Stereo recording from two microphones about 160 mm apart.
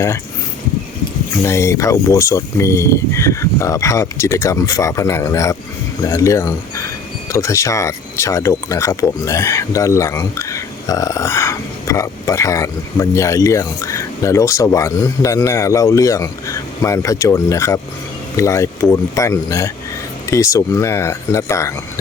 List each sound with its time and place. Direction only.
1.5 s speech: 15° left (ahead or behind)